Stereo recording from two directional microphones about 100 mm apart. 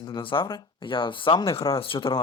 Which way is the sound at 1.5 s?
70° left (ahead or behind).